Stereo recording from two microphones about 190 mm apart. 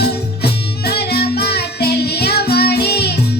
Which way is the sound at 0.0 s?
60° left (ahead or behind).